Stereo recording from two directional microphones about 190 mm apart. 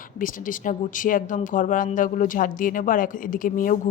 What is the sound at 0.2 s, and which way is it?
Speech, 45° left (ahead or behind).